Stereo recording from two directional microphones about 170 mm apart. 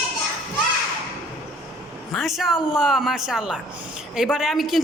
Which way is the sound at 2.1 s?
Centre (ahead or behind).